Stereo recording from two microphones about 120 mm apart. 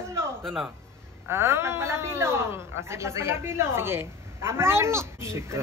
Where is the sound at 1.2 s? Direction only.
20° right (ahead or behind).